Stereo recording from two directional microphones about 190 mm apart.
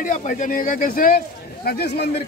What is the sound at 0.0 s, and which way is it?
A man's voice, 45° left (ahead or behind).